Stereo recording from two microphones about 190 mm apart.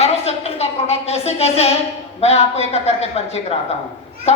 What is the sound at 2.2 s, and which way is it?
A woman's voice, 35° left (ahead or behind).